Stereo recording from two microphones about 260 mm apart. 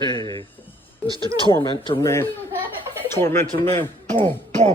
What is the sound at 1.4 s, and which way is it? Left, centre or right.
Speech, centre.